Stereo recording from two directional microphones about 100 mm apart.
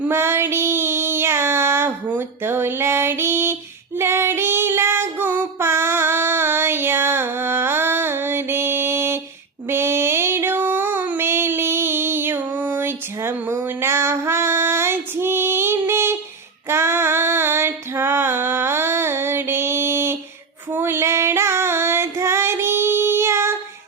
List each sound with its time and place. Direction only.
0.0 s child singing: 25° right (ahead or behind)
9.6 s a sound: 25° right (ahead or behind)
16.6 s female singing: 25° right (ahead or behind)